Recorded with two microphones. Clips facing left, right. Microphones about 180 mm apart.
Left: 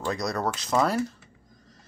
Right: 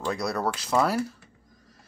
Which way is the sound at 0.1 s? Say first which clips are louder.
Even; 10° right (ahead or behind).